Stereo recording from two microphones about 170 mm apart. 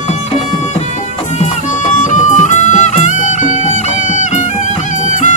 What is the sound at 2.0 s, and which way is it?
Music, 45° left (ahead or behind).